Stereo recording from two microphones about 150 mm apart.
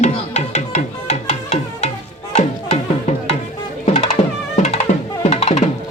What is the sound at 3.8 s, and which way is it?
Music, 40° left (ahead or behind).